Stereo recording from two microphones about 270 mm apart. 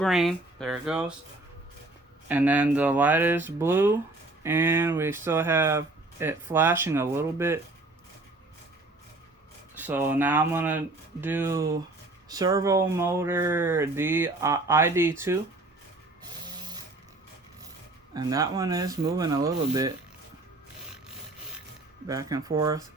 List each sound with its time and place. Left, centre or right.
0.0 s speech: centre
2.2 s speech: centre
9.7 s speech: centre
16.6 s sewing machine: centre
18.1 s speech: centre
22.0 s speech: centre